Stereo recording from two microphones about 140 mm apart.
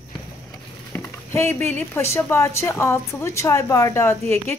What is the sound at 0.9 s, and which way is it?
Speech, 20° left (ahead or behind).